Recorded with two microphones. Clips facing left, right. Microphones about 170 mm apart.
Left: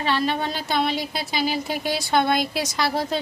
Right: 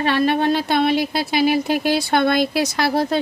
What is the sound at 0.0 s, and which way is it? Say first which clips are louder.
Speech: right 6 dB; 60° right (ahead or behind).